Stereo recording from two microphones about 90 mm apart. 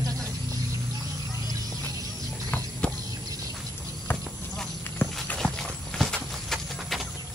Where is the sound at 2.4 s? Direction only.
15° left (ahead or behind).